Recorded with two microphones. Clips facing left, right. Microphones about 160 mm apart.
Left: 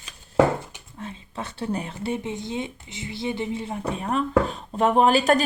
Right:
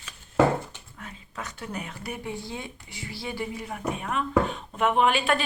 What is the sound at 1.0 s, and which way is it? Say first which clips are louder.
Speech: left 5 dB; 30° left (ahead or behind).